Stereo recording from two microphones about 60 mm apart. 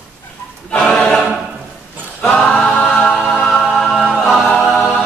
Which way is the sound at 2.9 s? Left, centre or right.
Centre.